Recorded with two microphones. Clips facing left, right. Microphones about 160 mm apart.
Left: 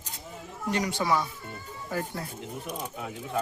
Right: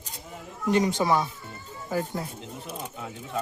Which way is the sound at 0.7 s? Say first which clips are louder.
Right 4 dB; 20° right (ahead or behind).